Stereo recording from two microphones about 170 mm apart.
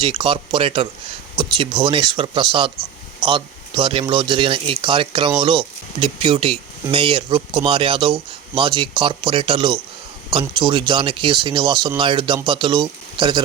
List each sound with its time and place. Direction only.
0.0 s speech: 30° right (ahead or behind)